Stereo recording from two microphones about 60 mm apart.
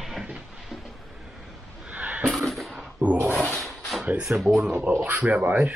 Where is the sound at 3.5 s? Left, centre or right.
Centre.